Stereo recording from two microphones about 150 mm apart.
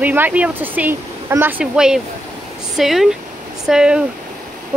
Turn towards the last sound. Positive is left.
turn(degrees=-5)  # may be behind; listen again after turning